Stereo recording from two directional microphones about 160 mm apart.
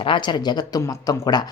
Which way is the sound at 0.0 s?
30° left (ahead or behind).